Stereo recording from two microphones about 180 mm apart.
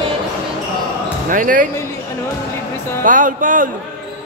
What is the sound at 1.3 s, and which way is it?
Music, 50° right (ahead or behind).